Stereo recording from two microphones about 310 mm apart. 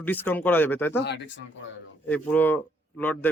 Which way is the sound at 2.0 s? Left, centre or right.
Centre.